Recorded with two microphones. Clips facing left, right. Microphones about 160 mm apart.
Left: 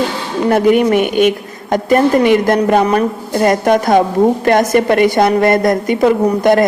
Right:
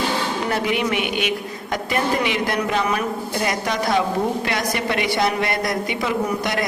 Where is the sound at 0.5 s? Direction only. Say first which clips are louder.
Left 13 dB; 45° left (ahead or behind).